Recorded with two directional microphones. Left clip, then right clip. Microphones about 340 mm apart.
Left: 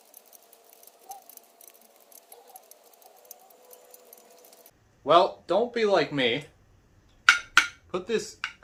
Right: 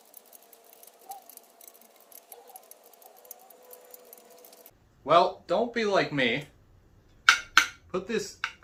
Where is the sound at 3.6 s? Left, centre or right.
Centre.